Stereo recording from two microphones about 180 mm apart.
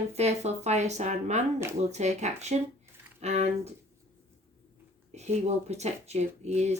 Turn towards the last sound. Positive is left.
turn(degrees=-40)  # may be behind; listen again after turning